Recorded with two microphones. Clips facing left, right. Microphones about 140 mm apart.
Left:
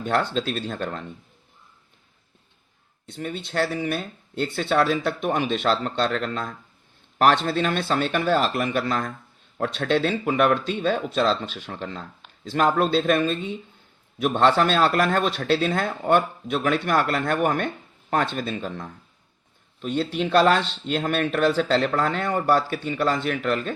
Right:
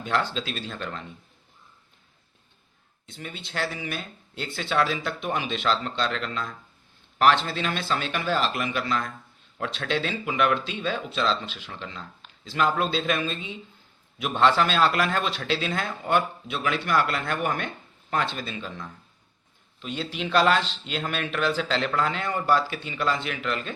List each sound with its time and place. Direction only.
0.0 s speech: 45° left (ahead or behind)
3.1 s speech: 45° left (ahead or behind)